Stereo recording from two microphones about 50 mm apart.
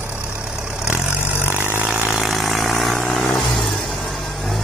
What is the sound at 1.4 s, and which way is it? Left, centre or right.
Vehicle, right.